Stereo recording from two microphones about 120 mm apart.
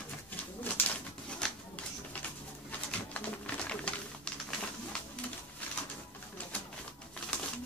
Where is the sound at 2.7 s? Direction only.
10° left (ahead or behind).